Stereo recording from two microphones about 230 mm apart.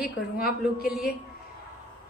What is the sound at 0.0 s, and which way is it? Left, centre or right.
Speech, left.